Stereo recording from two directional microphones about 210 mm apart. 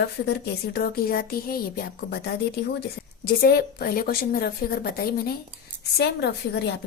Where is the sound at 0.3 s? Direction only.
50° left (ahead or behind).